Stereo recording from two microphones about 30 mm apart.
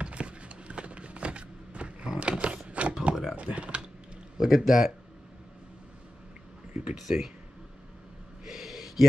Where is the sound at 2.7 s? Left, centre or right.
Right.